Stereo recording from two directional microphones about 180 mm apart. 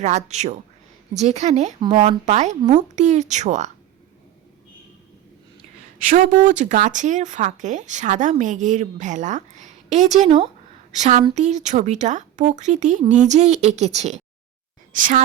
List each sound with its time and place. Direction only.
0.0 s speech: 40° right (ahead or behind)
6.1 s speech: 45° right (ahead or behind)